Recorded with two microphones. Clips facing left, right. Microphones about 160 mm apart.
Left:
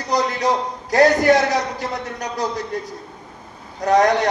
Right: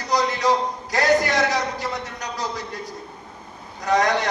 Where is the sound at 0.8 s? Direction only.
60° left (ahead or behind).